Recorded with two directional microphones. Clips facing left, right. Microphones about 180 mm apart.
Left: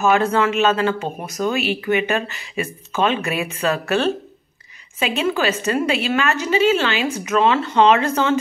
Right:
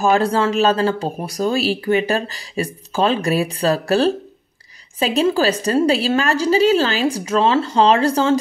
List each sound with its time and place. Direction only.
0.0 s a woman's voice: 35° right (ahead or behind)